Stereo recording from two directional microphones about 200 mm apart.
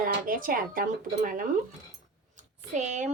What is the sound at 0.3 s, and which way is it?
A woman's voice, 45° right (ahead or behind).